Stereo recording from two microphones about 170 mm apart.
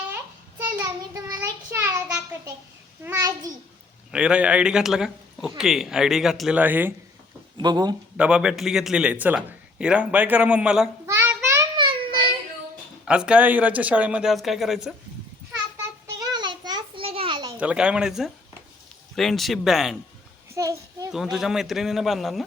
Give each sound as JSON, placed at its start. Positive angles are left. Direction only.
{"t": 0.6, "sound": "child singing", "side_deg": -20}
{"t": 3.0, "sound": "a child's voice", "side_deg": -20}
{"t": 4.1, "sound": "a man's voice", "side_deg": -5}
{"t": 7.5, "sound": "speech", "side_deg": -25}
{"t": 8.1, "sound": "a man's voice", "side_deg": -5}
{"t": 11.0, "sound": "a sound", "side_deg": -15}
{"t": 11.4, "sound": "child singing", "side_deg": -20}
{"t": 13.1, "sound": "a man's voice", "side_deg": -5}
{"t": 16.1, "sound": "a sound", "side_deg": -20}
{"t": 17.6, "sound": "a man's voice", "side_deg": -5}
{"t": 20.5, "sound": "a child's voice", "side_deg": -20}
{"t": 21.1, "sound": "a man's voice", "side_deg": 0}